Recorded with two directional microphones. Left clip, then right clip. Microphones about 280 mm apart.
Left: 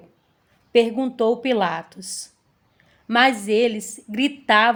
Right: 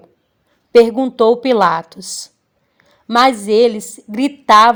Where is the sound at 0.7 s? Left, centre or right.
Right.